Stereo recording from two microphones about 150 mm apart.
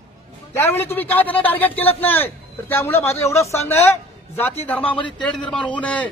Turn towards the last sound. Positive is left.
turn(degrees=10)  # may be behind; listen again after turning